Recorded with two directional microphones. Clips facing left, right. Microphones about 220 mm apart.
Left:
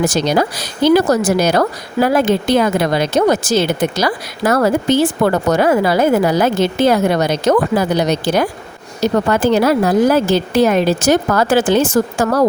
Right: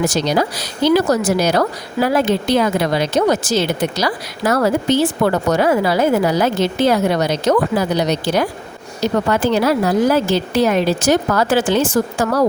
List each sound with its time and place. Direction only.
0.1 s speech: 50° left (ahead or behind)